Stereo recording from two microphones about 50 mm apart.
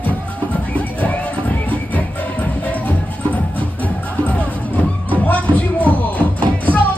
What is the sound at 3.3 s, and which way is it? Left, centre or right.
Music, left.